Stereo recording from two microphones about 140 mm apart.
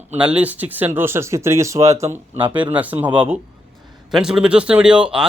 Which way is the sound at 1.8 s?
50° right (ahead or behind).